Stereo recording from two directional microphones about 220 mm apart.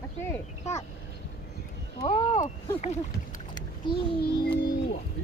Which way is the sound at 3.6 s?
20° left (ahead or behind).